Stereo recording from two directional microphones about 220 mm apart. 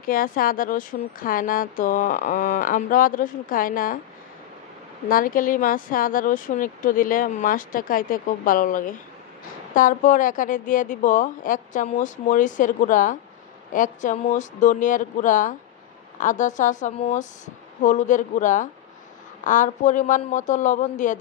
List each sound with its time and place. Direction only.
0.0 s a woman's voice: 40° left (ahead or behind)
5.0 s a woman's voice: 40° left (ahead or behind)